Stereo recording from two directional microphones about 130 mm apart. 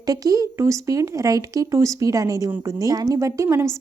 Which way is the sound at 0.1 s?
30° right (ahead or behind).